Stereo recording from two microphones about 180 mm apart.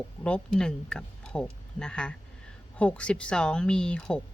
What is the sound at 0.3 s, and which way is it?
Speech, 5° left (ahead or behind).